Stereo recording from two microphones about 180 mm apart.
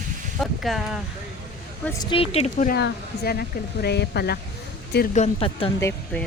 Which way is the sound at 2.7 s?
65° left (ahead or behind).